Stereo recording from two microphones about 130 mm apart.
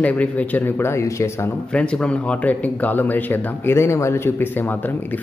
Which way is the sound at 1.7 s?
10° left (ahead or behind).